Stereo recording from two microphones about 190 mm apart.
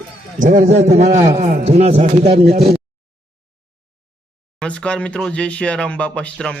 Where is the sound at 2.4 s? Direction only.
55° right (ahead or behind).